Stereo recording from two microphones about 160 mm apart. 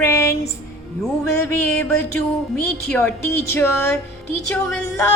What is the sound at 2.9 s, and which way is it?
A woman's voice, 10° left (ahead or behind).